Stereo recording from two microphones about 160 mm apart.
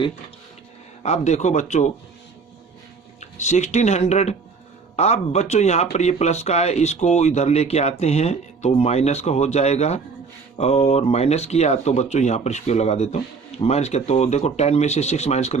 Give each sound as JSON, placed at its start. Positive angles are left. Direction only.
{"t": 1.0, "sound": "speech", "side_deg": 45}
{"t": 3.2, "sound": "speech", "side_deg": 45}